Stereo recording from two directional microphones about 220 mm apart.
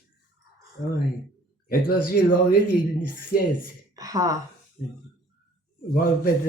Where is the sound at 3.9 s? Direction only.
15° right (ahead or behind).